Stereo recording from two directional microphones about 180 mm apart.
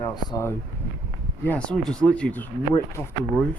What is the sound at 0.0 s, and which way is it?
Speech, 15° left (ahead or behind).